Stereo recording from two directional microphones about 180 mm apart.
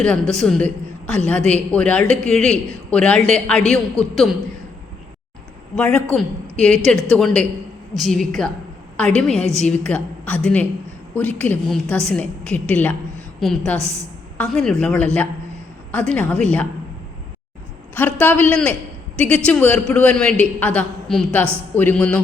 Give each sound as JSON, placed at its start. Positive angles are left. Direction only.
{"t": 0.0, "sound": "speech", "side_deg": 5}
{"t": 5.7, "sound": "a woman's voice", "side_deg": 5}
{"t": 13.8, "sound": "a woman's voice", "side_deg": -15}
{"t": 14.3, "sound": "a woman's voice", "side_deg": 5}
{"t": 17.9, "sound": "a man's voice", "side_deg": 10}